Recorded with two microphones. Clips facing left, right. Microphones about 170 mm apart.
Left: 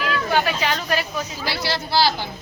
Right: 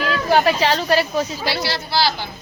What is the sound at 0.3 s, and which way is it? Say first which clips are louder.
Speech: right 7 dB; 35° right (ahead or behind).